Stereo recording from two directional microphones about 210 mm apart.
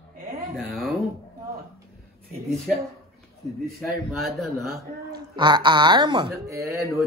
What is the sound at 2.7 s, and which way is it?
Speech, centre (ahead or behind).